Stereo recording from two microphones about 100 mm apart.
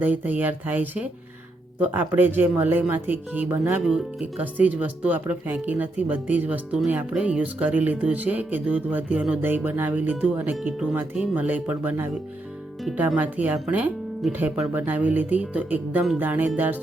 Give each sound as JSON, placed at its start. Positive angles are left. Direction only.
{"t": 0.0, "sound": "speech", "side_deg": -15}
{"t": 3.8, "sound": "speech", "side_deg": -5}
{"t": 4.4, "sound": "speech", "side_deg": -15}
{"t": 13.1, "sound": "speech", "side_deg": -15}